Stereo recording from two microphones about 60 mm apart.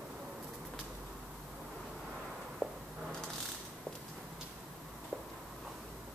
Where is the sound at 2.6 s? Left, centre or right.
Left.